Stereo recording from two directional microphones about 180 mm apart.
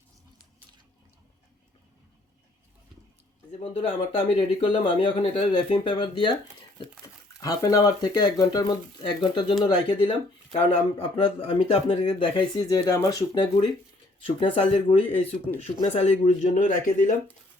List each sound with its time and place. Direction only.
3.6 s speech: 30° left (ahead or behind)